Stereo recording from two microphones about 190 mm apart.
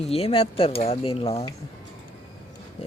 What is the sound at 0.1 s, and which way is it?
Speech, 30° left (ahead or behind).